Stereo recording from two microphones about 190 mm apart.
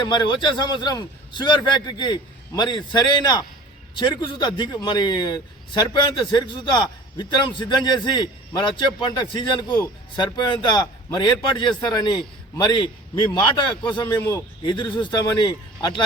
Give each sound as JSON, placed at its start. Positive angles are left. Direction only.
{"t": 0.0, "sound": "a man's voice", "side_deg": 25}